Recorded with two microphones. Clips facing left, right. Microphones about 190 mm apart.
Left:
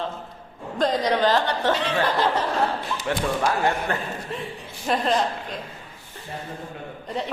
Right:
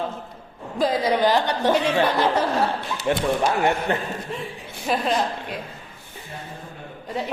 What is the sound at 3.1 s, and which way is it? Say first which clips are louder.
Speech: right 3 dB; 20° right (ahead or behind).